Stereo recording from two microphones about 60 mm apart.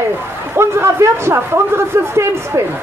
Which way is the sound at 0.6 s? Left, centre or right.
Right.